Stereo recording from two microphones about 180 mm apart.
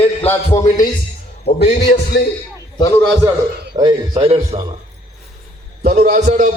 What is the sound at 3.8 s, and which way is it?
Speech, 25° right (ahead or behind).